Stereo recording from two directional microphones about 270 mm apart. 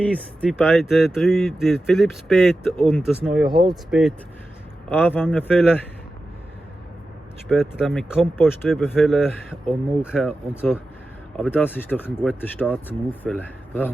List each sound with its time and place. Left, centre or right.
0.0 s speech: centre
3.5 s speech: centre
4.9 s speech: centre
7.4 s speech: centre